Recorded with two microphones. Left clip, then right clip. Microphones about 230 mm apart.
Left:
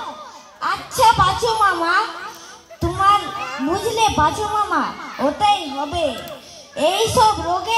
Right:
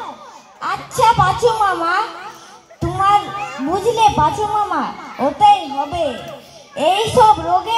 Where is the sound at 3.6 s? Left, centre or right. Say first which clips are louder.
Right 4 dB; right.